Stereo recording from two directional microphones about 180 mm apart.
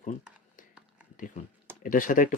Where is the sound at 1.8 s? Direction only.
50° left (ahead or behind).